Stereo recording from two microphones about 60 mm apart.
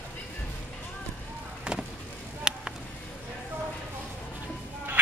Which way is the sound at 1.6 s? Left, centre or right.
Centre.